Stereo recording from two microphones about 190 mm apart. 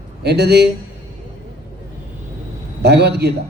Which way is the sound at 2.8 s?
60° right (ahead or behind).